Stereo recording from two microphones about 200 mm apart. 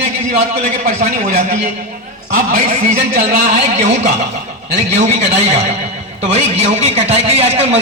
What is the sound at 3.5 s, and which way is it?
Speech, 35° right (ahead or behind).